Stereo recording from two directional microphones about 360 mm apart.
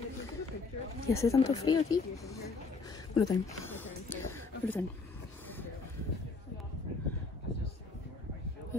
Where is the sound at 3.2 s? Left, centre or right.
Centre.